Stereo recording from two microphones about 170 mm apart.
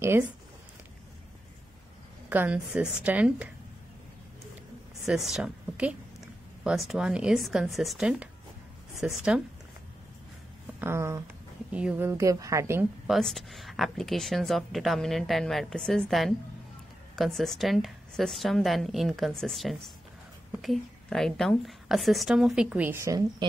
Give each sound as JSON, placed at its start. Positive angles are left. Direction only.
{"t": 0.0, "sound": "a woman's voice", "side_deg": -15}
{"t": 2.2, "sound": "a woman's voice", "side_deg": -10}
{"t": 5.0, "sound": "a woman's voice", "side_deg": -5}
{"t": 10.8, "sound": "a woman's voice", "side_deg": -15}
{"t": 13.0, "sound": "a woman's voice", "side_deg": 0}